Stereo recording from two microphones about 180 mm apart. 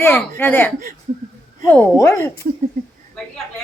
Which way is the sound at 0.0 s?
10° left (ahead or behind).